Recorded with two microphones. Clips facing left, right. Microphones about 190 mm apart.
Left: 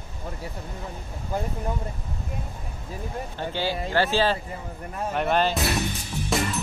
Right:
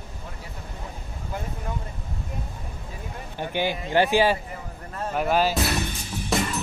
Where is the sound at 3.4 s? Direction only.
15° right (ahead or behind).